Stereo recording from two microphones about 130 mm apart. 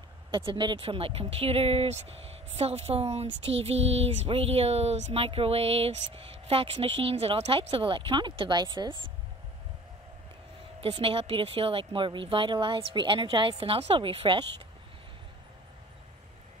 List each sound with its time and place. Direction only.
0.3 s a woman's voice: 40° right (ahead or behind)
10.8 s speech: 45° right (ahead or behind)